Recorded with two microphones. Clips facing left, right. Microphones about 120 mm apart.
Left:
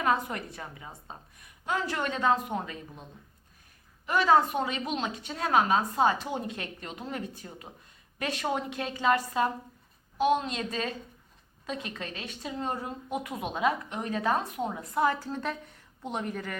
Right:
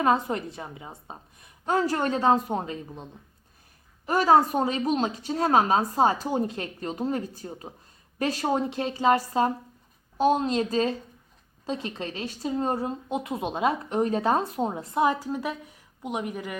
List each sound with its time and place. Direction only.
0.0 s speech: 30° right (ahead or behind)
4.0 s a woman's voice: 40° right (ahead or behind); by 16.6 s 10° right (ahead or behind)